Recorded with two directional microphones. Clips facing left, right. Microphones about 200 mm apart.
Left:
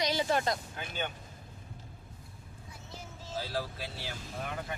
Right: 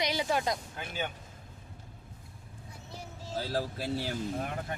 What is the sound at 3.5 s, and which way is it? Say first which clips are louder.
Speech: right 5 dB; 40° right (ahead or behind).